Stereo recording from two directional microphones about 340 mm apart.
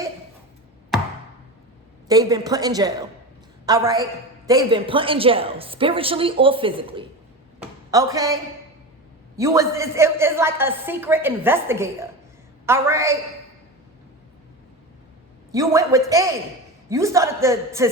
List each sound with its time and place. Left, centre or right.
2.0 s a woman's voice: centre
9.4 s a woman's voice: centre
15.5 s a woman's voice: centre